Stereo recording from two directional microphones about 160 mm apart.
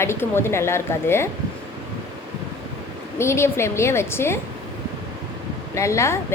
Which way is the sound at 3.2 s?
15° left (ahead or behind).